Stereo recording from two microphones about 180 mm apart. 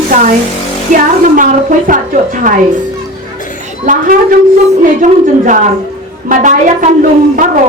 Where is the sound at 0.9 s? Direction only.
50° right (ahead or behind).